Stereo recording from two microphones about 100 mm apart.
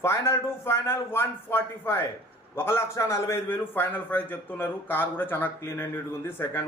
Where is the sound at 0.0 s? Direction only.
25° left (ahead or behind).